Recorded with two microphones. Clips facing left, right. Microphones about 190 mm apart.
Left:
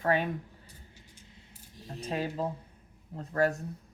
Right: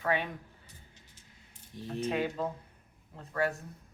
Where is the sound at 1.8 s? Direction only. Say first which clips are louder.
Right 8 dB; 60° right (ahead or behind).